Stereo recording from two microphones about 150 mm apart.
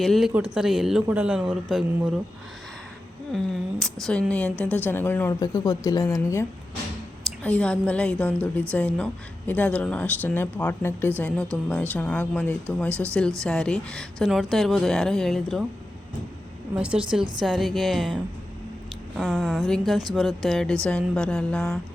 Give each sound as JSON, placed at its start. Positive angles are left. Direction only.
{"t": 0.0, "sound": "a man's voice", "side_deg": 0}
{"t": 3.3, "sound": "speech", "side_deg": 5}
{"t": 7.4, "sound": "speech", "side_deg": 10}
{"t": 16.7, "sound": "a man's voice", "side_deg": -5}